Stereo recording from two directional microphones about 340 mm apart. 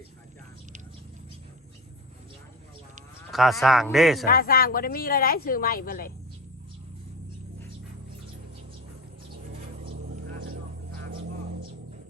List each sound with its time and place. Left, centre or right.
3.3 s a man's voice: centre
4.3 s a woman's voice: left